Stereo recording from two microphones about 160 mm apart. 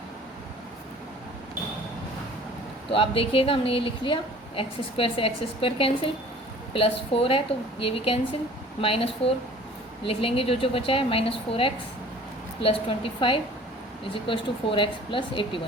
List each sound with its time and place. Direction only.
2.9 s a woman's voice: 35° left (ahead or behind)